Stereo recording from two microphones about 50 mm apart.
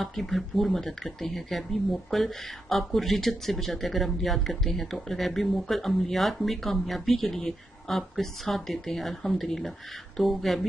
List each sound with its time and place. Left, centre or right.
0.0 s speech: centre